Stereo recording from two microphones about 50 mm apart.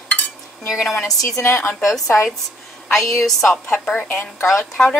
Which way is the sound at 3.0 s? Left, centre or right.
Left.